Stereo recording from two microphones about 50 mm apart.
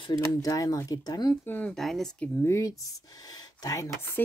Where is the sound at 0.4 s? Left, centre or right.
Left.